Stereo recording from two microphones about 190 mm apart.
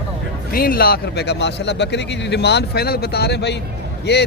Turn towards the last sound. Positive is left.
turn(degrees=60)  # may be behind; listen again after turning